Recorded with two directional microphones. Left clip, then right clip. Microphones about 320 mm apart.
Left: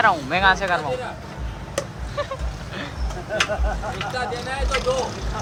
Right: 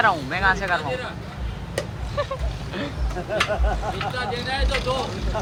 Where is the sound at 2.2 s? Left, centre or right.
Centre.